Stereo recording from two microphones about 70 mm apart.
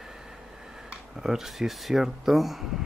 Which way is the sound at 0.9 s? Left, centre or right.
Centre.